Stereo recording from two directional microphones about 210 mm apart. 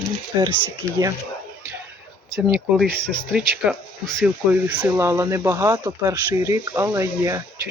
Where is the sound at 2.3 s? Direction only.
Centre (ahead or behind).